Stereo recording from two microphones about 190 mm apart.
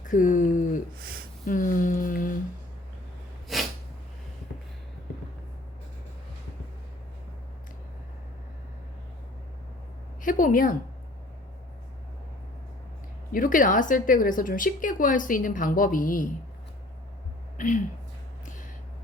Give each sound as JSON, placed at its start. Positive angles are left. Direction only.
{"t": 0.0, "sound": "a sound", "side_deg": 45}
{"t": 3.5, "sound": "sneeze", "side_deg": 0}
{"t": 10.2, "sound": "a woman's voice", "side_deg": 45}
{"t": 13.3, "sound": "a woman's voice", "side_deg": 45}
{"t": 17.6, "sound": "speech", "side_deg": 40}